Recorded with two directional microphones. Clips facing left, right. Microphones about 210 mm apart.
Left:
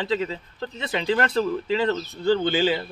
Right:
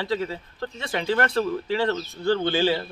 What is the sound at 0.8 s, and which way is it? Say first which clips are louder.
Speech: left 1 dB; 20° left (ahead or behind).